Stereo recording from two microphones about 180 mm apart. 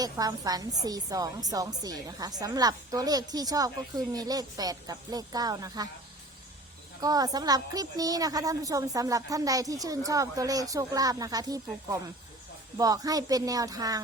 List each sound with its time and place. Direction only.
0.0 s a woman's voice: 20° right (ahead or behind)
7.0 s a woman's voice: 20° right (ahead or behind)